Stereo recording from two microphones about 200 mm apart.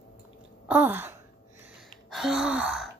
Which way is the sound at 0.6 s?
10° right (ahead or behind).